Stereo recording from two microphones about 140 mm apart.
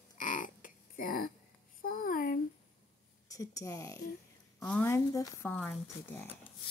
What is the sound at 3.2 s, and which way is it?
Speech, 25° left (ahead or behind).